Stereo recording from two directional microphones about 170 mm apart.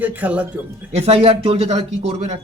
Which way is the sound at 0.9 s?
40° right (ahead or behind).